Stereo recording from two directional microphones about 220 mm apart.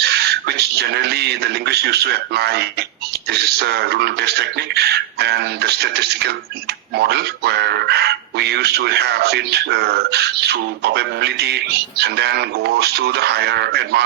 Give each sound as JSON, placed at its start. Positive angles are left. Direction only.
{"t": 0.0, "sound": "speech", "side_deg": -50}